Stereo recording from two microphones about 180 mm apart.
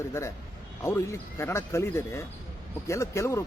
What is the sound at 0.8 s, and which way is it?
Speech, 15° left (ahead or behind).